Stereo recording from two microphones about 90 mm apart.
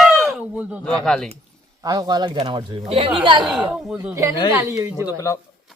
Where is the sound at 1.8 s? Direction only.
50° right (ahead or behind).